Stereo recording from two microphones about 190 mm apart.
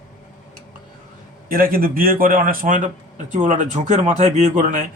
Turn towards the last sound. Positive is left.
turn(degrees=-45)  # may be behind; listen again after turning